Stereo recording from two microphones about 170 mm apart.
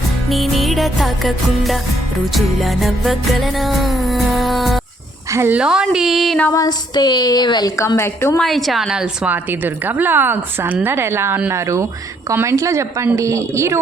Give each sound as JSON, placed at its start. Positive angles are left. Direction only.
{"t": 0.3, "sound": "music", "side_deg": 0}
{"t": 5.3, "sound": "music", "side_deg": -10}
{"t": 6.5, "sound": "a woman's voice", "side_deg": 20}
{"t": 8.4, "sound": "a woman's voice", "side_deg": 0}